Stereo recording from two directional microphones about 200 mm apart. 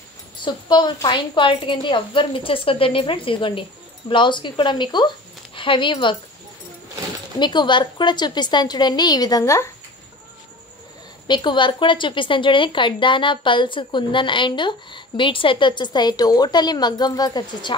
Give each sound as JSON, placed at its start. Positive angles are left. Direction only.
{"t": 0.4, "sound": "a woman's voice", "side_deg": 20}
{"t": 7.3, "sound": "a woman's voice", "side_deg": 20}
{"t": 11.2, "sound": "a woman's voice", "side_deg": 20}